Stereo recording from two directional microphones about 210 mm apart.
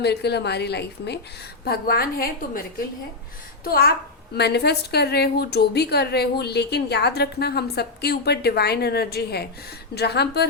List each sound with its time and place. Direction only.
0.0 s a woman's voice: 50° left (ahead or behind)